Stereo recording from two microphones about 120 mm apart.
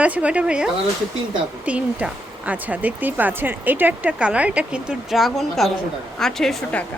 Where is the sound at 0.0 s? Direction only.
10° right (ahead or behind); by 6.8 s 5° left (ahead or behind).